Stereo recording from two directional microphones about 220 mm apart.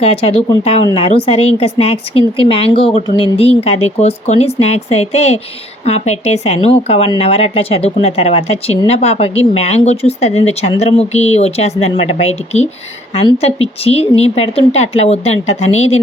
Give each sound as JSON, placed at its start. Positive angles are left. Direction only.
{"t": 0.0, "sound": "a woman's voice", "side_deg": 25}